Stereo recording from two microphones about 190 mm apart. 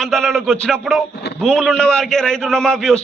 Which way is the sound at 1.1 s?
60° left (ahead or behind).